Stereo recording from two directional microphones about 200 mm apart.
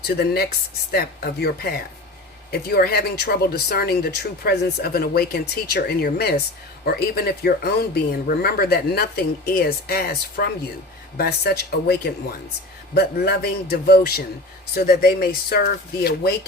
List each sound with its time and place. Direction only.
0.0 s speech: 55° left (ahead or behind)